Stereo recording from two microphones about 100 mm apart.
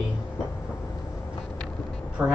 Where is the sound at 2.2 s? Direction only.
15° right (ahead or behind).